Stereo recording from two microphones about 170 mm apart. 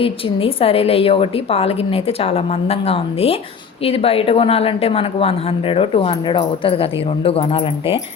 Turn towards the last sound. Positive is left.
turn(degrees=35)  # may be behind; listen again after turning